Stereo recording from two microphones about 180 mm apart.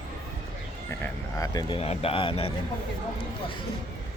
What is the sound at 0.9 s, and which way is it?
Speech, 15° left (ahead or behind).